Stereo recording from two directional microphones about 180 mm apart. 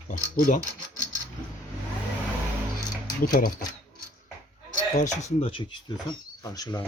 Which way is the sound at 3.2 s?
50° left (ahead or behind).